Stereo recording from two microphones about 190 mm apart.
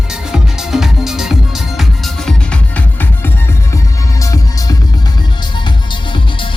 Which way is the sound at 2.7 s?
10° left (ahead or behind).